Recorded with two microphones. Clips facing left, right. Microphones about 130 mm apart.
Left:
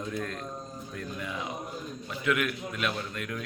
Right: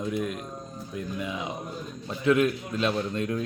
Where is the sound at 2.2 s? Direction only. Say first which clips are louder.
Right 7 dB; 30° right (ahead or behind).